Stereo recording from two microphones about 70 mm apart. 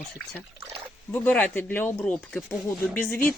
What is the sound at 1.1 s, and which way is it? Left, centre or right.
Speech, left.